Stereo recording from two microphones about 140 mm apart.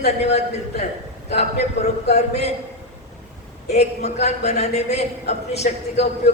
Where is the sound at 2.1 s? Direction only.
50° left (ahead or behind).